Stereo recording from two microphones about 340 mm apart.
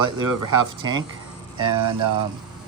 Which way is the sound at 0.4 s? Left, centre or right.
Centre.